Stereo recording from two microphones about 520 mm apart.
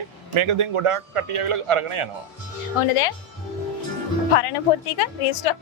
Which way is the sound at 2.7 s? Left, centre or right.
Left.